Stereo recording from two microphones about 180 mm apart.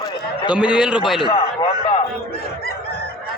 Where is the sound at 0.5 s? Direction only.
5° right (ahead or behind).